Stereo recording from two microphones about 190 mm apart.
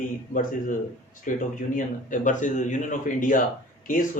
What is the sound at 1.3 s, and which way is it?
Speech, 40° left (ahead or behind).